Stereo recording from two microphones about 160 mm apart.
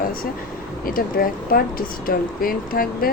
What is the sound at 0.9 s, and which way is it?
Speech, 65° left (ahead or behind).